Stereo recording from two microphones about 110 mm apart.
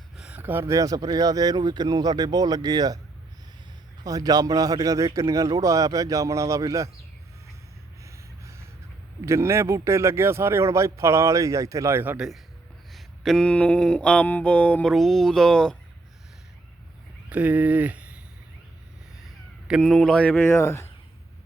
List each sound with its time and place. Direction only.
0.2 s speech: 15° right (ahead or behind); by 3.0 s 35° right (ahead or behind)
4.0 s speech: 35° right (ahead or behind)
8.0 s snort: 25° right (ahead or behind)
9.2 s speech: 25° right (ahead or behind)
12.1 s a man's voice: 5° right (ahead or behind)
12.9 s mantra: centre (ahead or behind)
14.9 s speech: centre (ahead or behind)
17.2 s speech: 15° right (ahead or behind)
19.8 s mantra: 5° left (ahead or behind); by 20.9 s 25° left (ahead or behind)